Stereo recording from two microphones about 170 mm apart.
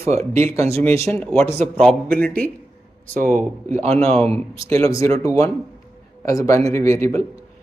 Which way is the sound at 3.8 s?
35° right (ahead or behind).